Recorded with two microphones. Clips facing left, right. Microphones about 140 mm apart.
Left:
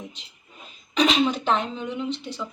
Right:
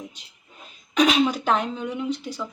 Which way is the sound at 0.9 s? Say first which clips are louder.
Right 1 dB; 5° right (ahead or behind).